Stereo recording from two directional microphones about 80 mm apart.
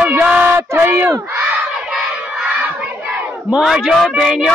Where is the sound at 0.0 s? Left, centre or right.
Right.